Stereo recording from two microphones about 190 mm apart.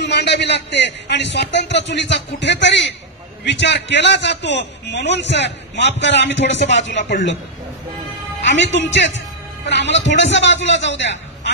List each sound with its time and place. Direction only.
0.0 s a man's voice: 65° left (ahead or behind)
7.1 s a man's voice: 40° left (ahead or behind)
8.7 s a man's voice: 70° left (ahead or behind)